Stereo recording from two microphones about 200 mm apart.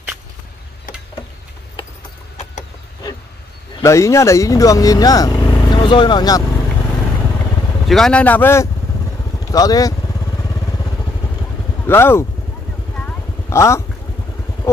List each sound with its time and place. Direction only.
3.8 s speech: 15° left (ahead or behind)
7.9 s speech: 5° left (ahead or behind)
11.8 s speech: 10° left (ahead or behind)
12.9 s vehicle: 5° left (ahead or behind)